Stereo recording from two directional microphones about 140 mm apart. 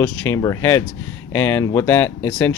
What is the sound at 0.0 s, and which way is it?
Speech, 15° left (ahead or behind).